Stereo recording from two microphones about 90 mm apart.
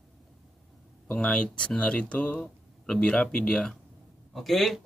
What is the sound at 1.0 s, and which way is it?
Speech, 10° left (ahead or behind).